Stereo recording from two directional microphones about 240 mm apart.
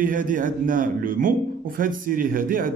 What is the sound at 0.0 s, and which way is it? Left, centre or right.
Speech, right.